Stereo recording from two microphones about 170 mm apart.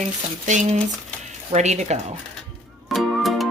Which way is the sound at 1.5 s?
40° right (ahead or behind).